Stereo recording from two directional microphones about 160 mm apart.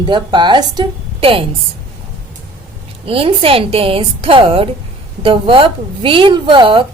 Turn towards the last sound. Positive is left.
turn(degrees=-30)  # may be behind; listen again after turning